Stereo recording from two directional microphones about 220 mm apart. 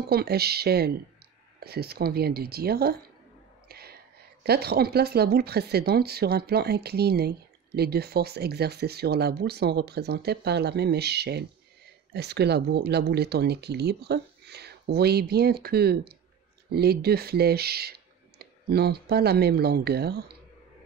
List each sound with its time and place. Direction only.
0.0 s speech: 45° right (ahead or behind)
3.6 s whispering: 45° right (ahead or behind)
4.4 s speech: 45° right (ahead or behind)